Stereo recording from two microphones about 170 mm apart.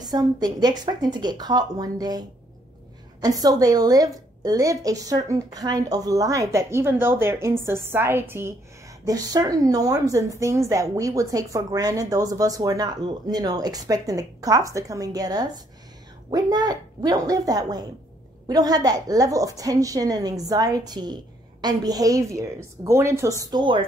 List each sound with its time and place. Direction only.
0.0 s a woman's voice: 25° right (ahead or behind)
23.4 s a woman's voice: 25° right (ahead or behind)